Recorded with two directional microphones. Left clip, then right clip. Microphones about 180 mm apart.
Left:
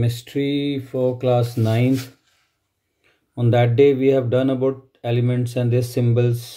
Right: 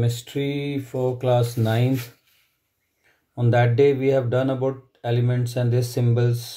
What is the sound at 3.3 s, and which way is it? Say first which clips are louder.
Speech: left 2 dB; 20° left (ahead or behind).